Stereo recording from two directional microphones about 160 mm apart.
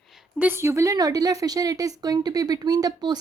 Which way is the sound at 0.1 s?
10° right (ahead or behind).